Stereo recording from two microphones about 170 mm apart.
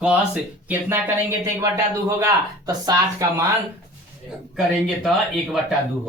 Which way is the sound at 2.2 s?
20° right (ahead or behind).